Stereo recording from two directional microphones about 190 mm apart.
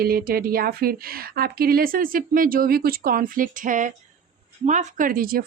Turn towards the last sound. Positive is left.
turn(degrees=-50)  # may be behind; listen again after turning